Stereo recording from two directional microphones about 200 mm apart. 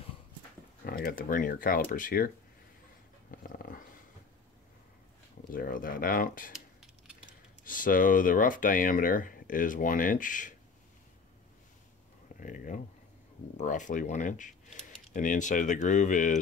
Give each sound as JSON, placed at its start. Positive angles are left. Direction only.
{"t": 0.8, "sound": "speech", "side_deg": 45}
{"t": 3.4, "sound": "dog", "side_deg": 45}
{"t": 5.5, "sound": "speech", "side_deg": 45}
{"t": 6.5, "sound": "keys jangling", "side_deg": 0}
{"t": 7.6, "sound": "speech", "side_deg": 45}
{"t": 12.4, "sound": "a sound", "side_deg": 40}
{"t": 13.6, "sound": "speech", "side_deg": 40}